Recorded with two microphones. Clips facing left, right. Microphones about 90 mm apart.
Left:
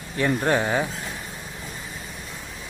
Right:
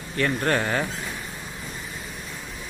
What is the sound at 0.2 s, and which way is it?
Speech, 10° left (ahead or behind).